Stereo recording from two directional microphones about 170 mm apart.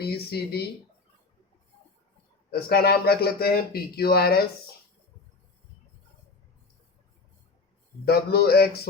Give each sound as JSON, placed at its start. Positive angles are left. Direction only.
{"t": 0.0, "sound": "speech", "side_deg": 70}
{"t": 2.5, "sound": "speech", "side_deg": 65}
{"t": 8.0, "sound": "speech", "side_deg": 70}